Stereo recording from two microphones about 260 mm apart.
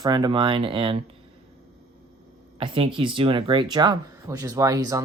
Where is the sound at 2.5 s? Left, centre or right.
Right.